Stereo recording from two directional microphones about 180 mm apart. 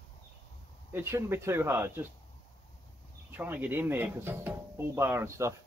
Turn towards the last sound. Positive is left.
turn(degrees=-15)  # may be behind; listen again after turning